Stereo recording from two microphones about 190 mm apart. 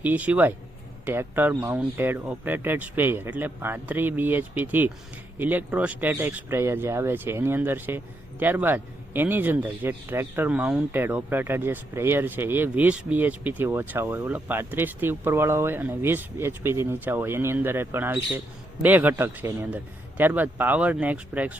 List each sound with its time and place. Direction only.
0.0 s speech: 10° right (ahead or behind)